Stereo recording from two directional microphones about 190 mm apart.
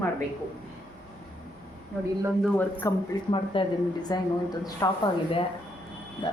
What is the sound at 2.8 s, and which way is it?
Speech, 15° left (ahead or behind).